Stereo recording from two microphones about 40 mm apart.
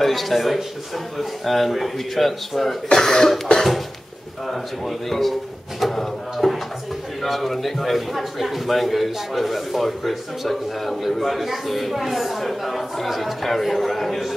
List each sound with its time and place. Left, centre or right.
0.0 s a man's voice: centre
2.9 s speech: centre
4.5 s a man's voice: centre